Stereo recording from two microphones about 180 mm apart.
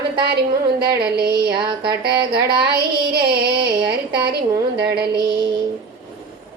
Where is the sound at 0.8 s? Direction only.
60° right (ahead or behind).